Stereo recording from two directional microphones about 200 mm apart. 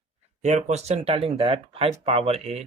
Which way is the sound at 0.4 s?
35° right (ahead or behind).